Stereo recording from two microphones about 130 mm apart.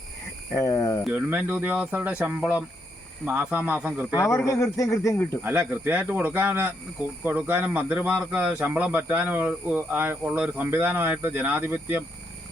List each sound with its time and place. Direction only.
0.5 s speech: 25° left (ahead or behind)
1.1 s speech: 10° right (ahead or behind)
4.1 s speech: 25° left (ahead or behind)
5.1 s speech: 10° left (ahead or behind)
5.4 s speech: 15° right (ahead or behind)